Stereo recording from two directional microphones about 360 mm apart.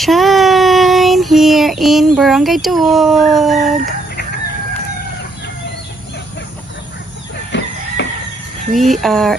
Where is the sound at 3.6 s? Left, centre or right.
Right.